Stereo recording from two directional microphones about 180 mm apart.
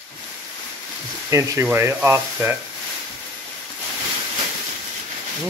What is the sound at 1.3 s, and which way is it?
Rub, 15° right (ahead or behind).